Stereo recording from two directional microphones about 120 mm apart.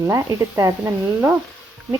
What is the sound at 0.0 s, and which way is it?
A woman's voice, 25° right (ahead or behind).